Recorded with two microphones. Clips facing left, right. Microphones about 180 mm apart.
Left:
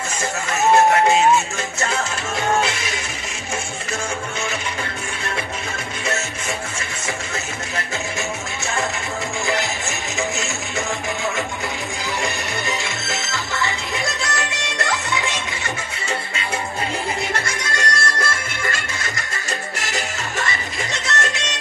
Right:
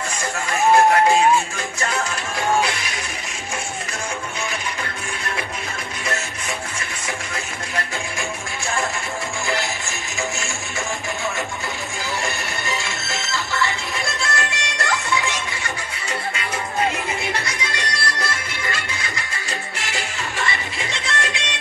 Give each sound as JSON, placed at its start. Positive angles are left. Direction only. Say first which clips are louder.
{"t": 2.6, "sound": "music", "louder": "left 1 dB", "side_deg": 25}
{"t": 12.2, "sound": "music", "louder": "left 2 dB", "side_deg": 20}
{"t": 17.5, "sound": "music", "louder": "left 3 dB", "side_deg": 45}